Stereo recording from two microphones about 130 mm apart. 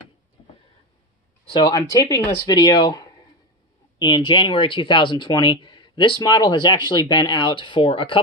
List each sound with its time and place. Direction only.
1.6 s speech: 30° left (ahead or behind)